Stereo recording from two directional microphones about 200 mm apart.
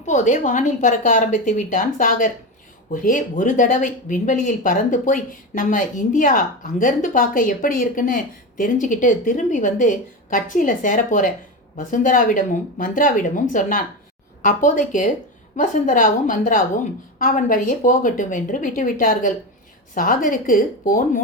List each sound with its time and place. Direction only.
0.0 s a woman's voice: 35° left (ahead or behind)